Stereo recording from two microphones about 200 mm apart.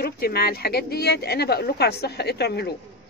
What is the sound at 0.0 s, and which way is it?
A woman's voice, 50° left (ahead or behind).